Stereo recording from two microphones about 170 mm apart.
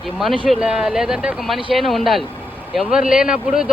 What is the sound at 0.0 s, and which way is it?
A man's voice, centre (ahead or behind).